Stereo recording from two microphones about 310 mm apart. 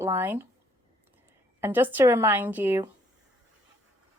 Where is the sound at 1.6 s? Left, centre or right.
Centre.